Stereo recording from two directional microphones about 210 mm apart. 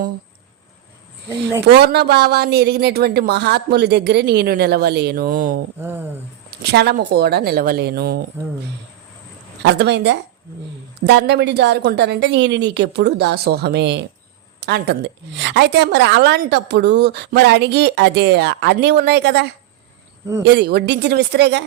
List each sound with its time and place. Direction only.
1.6 s a woman's voice: 50° right (ahead or behind)
5.8 s speech: 10° right (ahead or behind)
6.6 s a woman's voice: 50° right (ahead or behind)
9.6 s a woman's voice: 55° right (ahead or behind)